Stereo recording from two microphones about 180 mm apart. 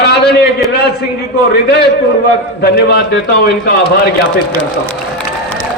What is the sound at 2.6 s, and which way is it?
A man's voice, 65° left (ahead or behind).